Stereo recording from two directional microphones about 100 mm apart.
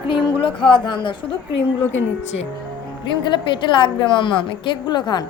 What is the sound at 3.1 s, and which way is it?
A woman's voice, 50° left (ahead or behind).